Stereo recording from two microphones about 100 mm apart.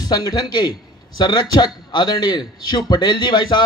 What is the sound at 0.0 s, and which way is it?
A man's voice, 40° left (ahead or behind).